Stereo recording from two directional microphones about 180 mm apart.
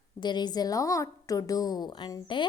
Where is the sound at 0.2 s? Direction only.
25° left (ahead or behind).